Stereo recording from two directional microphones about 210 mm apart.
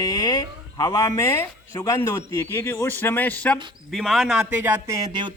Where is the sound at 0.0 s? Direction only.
20° left (ahead or behind); by 4.9 s 10° right (ahead or behind).